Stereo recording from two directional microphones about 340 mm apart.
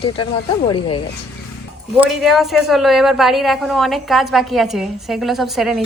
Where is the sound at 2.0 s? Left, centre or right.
Centre.